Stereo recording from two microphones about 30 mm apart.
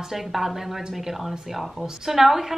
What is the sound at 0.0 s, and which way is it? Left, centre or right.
A woman's voice, centre.